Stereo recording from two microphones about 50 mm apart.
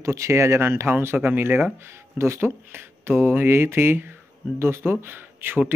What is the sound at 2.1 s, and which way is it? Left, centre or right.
Speech, right.